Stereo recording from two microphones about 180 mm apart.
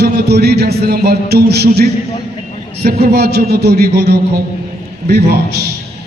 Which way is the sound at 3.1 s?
65° right (ahead or behind).